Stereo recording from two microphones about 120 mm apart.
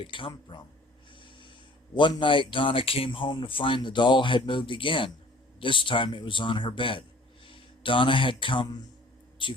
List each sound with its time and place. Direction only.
0.0 s speech: 45° left (ahead or behind)
2.0 s speech: 45° left (ahead or behind)